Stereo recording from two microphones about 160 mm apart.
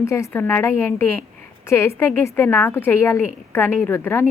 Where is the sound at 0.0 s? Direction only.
15° left (ahead or behind).